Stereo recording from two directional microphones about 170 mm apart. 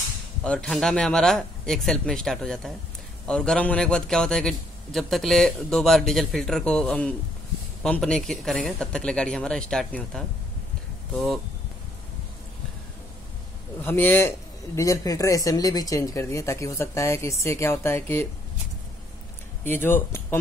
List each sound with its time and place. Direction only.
0.4 s a man's voice: 5° left (ahead or behind)
13.8 s speech: 10° left (ahead or behind)
19.6 s speech: 10° left (ahead or behind)